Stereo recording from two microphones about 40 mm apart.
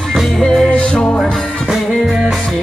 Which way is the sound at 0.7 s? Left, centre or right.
Left.